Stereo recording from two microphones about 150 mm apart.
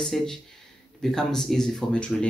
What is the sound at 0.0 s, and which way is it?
Speech, 5° left (ahead or behind).